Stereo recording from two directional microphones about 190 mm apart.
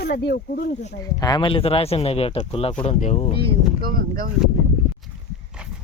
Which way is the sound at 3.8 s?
50° right (ahead or behind).